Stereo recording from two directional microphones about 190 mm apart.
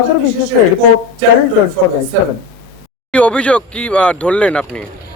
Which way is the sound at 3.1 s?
5° left (ahead or behind).